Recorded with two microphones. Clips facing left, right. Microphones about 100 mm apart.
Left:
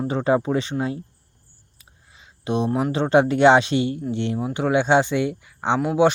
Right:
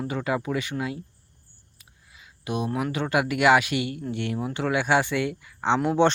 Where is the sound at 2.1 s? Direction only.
25° left (ahead or behind).